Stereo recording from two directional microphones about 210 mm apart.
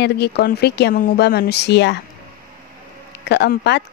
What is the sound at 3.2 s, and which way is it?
Speech, 55° left (ahead or behind).